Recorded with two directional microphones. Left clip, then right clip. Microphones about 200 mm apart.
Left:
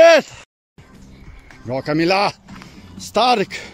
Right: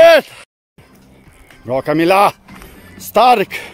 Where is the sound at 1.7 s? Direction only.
30° right (ahead or behind).